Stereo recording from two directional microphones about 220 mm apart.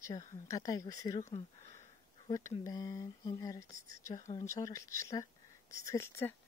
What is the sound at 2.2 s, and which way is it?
Speech, 15° left (ahead or behind).